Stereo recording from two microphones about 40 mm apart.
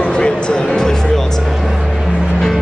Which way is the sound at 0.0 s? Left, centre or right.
Left.